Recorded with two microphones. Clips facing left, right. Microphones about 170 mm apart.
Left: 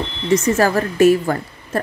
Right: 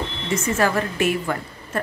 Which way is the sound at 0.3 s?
40° left (ahead or behind).